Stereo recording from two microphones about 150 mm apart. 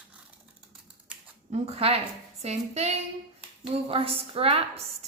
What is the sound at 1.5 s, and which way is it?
A woman's voice, 40° right (ahead or behind).